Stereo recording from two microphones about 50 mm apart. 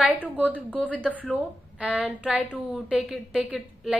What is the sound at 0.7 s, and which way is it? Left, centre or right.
Speech, left.